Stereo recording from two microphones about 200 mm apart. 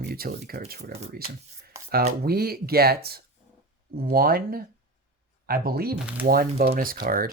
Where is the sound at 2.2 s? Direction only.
50° right (ahead or behind).